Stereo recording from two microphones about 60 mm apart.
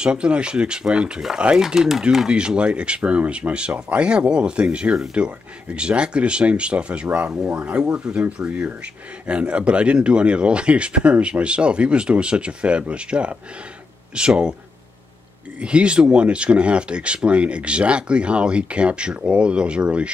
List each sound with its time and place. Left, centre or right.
0.0 s speech: centre
15.6 s speech: centre